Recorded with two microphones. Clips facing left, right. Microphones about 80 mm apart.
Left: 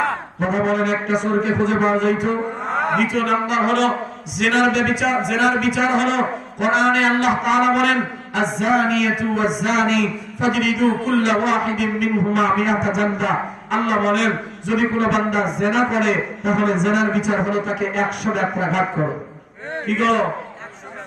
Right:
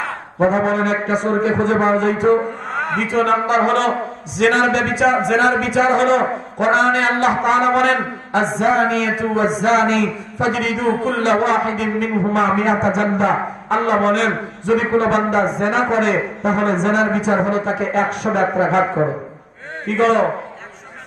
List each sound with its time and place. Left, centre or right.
0.3 s a man's voice: right
2.7 s a sound: centre
3.1 s a man's voice: right